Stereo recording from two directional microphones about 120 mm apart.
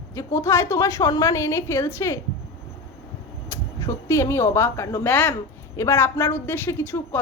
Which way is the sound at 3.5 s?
25° left (ahead or behind).